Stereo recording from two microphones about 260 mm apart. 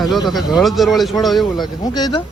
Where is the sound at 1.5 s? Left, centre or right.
Centre.